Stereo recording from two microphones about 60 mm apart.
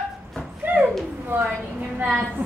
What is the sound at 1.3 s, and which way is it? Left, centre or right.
Speech, right.